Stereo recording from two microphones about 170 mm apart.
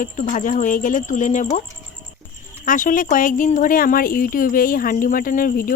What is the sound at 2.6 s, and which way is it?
Speech, 50° left (ahead or behind).